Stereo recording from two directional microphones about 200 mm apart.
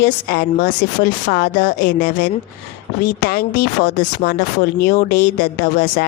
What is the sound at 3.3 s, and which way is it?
Speech, 50° left (ahead or behind).